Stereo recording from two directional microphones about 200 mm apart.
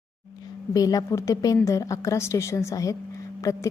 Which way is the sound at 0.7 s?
20° left (ahead or behind).